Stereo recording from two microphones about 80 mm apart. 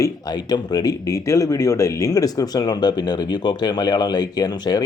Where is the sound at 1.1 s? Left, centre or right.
Left.